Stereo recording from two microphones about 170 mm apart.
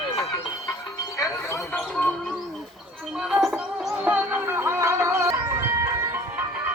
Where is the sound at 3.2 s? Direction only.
Centre (ahead or behind).